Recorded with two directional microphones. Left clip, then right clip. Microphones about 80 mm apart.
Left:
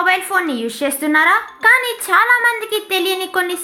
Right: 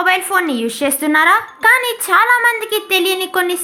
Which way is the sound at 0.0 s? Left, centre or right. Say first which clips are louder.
Right 1 dB; right.